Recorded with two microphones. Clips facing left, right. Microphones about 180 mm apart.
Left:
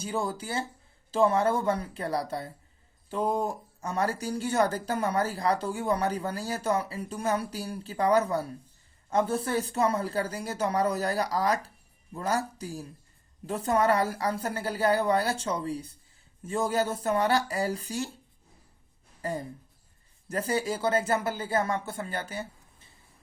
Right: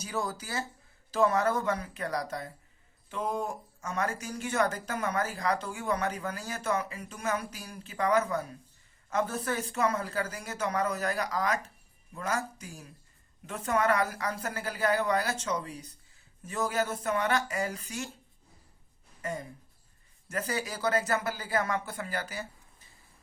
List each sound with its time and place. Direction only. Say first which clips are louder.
0.0 s speech: left 3 dB; 25° left (ahead or behind)
19.2 s speech: left 3 dB; 35° left (ahead or behind)